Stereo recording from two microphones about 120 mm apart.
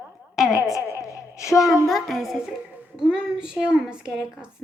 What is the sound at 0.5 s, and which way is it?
A woman's voice, 25° left (ahead or behind).